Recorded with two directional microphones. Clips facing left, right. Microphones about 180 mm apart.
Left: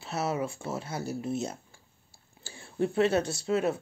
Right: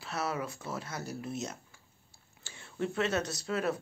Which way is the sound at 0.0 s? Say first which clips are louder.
Left 4 dB; 25° left (ahead or behind).